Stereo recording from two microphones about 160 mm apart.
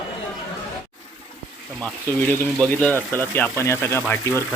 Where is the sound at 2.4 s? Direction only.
10° left (ahead or behind).